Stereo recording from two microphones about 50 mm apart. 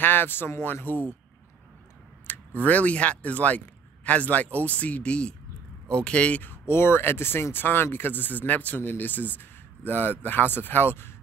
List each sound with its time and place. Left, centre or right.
0.0 s speech: left
2.2 s speech: left
6.7 s speech: left